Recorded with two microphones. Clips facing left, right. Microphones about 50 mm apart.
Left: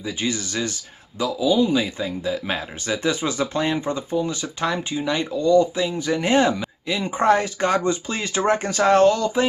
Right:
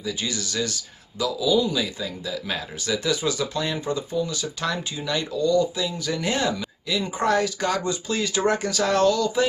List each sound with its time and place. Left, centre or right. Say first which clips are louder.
0.0 s speech: left 3 dB; left